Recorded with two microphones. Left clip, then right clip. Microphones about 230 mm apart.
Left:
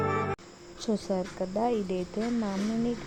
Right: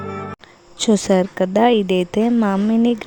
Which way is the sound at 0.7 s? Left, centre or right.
Right.